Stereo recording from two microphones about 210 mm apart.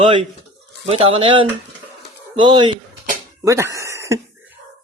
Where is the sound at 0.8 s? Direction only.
30° right (ahead or behind).